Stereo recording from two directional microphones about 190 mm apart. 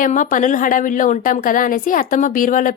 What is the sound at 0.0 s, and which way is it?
A woman's voice, 45° left (ahead or behind).